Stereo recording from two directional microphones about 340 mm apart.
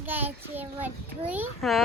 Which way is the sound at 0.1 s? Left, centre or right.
Centre.